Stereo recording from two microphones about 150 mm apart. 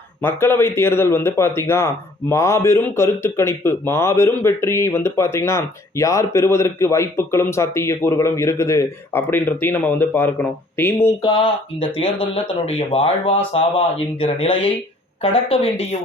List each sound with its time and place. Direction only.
0.2 s a man's voice: 15° left (ahead or behind)
11.2 s speech: 30° left (ahead or behind)